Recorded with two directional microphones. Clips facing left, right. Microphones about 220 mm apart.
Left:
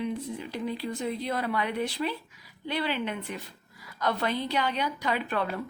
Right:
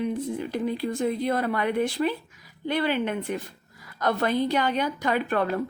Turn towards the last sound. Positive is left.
turn(degrees=-50)  # may be behind; listen again after turning